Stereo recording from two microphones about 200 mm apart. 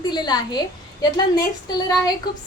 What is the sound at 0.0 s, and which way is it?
Speech, 20° left (ahead or behind).